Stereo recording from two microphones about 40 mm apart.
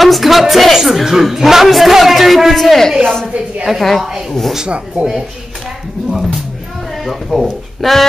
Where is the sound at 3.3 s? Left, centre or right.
Right.